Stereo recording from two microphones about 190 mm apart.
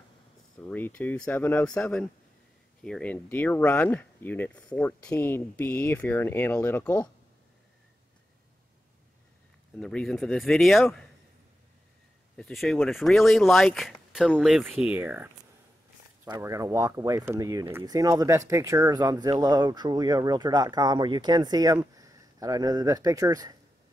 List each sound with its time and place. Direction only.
0.6 s speech: 10° left (ahead or behind)
9.8 s speech: 5° left (ahead or behind)
12.4 s speech: 5° left (ahead or behind); by 23.5 s 20° right (ahead or behind)